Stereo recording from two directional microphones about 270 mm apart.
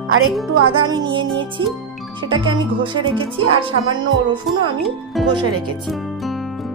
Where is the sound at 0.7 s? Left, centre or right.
Centre.